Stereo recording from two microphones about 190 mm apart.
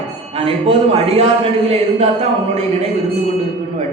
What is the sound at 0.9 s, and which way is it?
Speech, 30° right (ahead or behind).